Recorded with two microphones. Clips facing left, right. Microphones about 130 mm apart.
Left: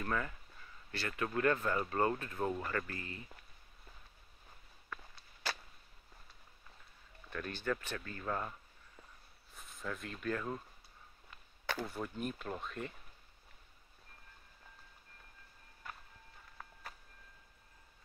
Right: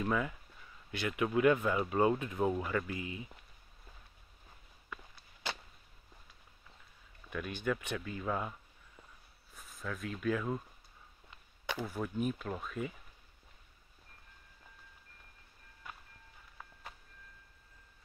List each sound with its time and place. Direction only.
0.0 s speech: 10° right (ahead or behind)
5.4 s a sound: 20° right (ahead or behind)
7.2 s speech: 10° right (ahead or behind)
9.6 s speech: centre (ahead or behind)
11.2 s speech: 15° right (ahead or behind)